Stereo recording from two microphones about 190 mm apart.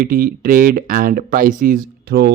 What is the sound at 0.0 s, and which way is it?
Speech, 50° right (ahead or behind).